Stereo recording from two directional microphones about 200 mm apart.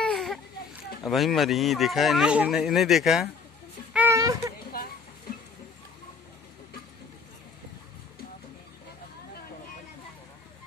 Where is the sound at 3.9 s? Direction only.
10° right (ahead or behind).